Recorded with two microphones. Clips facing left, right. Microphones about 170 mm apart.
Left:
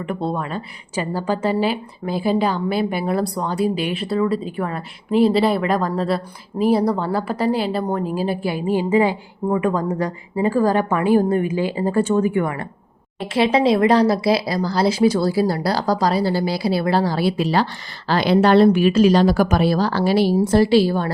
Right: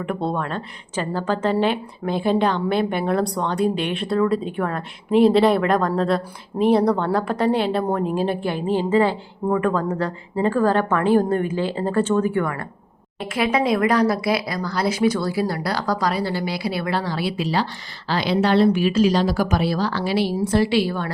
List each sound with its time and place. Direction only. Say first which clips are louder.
0.0 s a woman's voice: even; centre (ahead or behind); by 21.1 s 35° left (ahead or behind)